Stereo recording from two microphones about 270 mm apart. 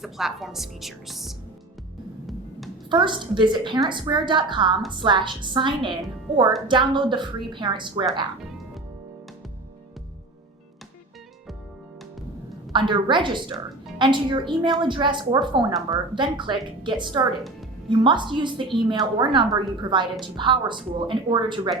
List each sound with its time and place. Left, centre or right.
0.0 s a woman's voice: centre
2.9 s a woman's voice: centre
8.4 s music: centre
12.7 s a woman's voice: centre